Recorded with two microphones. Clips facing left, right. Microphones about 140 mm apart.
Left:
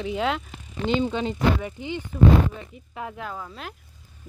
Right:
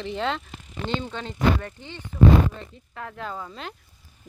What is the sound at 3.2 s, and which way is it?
Speech, centre (ahead or behind).